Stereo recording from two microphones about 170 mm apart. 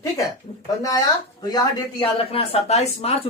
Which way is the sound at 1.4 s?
25° left (ahead or behind).